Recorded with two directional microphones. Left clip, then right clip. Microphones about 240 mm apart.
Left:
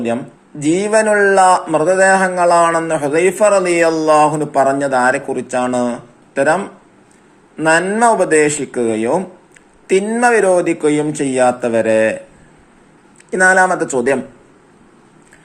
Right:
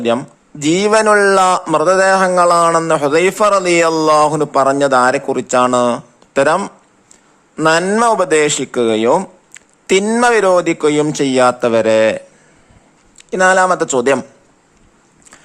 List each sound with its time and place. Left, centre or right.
0.0 s speech: right
0.9 s speech: right
1.2 s a man's voice: right
7.7 s speech: right
8.2 s a man's voice: right
13.6 s a man's voice: right